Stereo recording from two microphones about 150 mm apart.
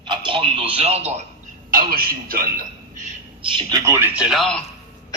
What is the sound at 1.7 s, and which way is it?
A man's voice, 70° right (ahead or behind).